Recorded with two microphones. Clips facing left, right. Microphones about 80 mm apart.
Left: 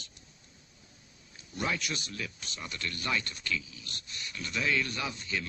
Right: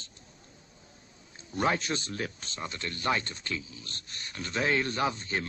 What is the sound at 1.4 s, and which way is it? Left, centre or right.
A man's voice, right.